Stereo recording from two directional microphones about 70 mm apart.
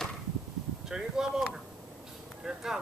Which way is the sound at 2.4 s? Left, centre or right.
Centre.